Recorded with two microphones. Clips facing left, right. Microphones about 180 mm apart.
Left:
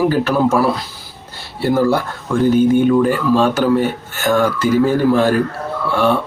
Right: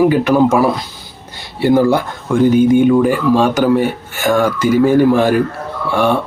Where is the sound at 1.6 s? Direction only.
15° right (ahead or behind).